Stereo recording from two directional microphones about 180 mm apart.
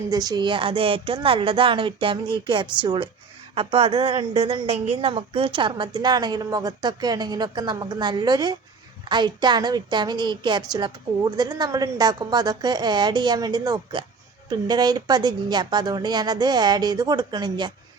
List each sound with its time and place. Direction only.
0.1 s a woman's voice: 20° right (ahead or behind)